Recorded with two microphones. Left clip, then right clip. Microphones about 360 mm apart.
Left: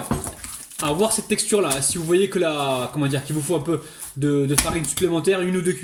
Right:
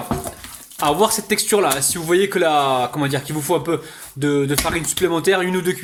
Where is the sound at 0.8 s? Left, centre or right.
Centre.